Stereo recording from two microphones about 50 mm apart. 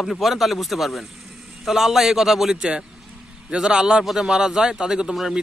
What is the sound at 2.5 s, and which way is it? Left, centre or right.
A man's voice, centre.